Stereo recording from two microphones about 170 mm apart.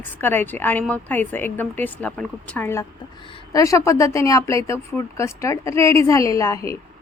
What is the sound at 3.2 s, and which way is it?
Speech, 25° left (ahead or behind).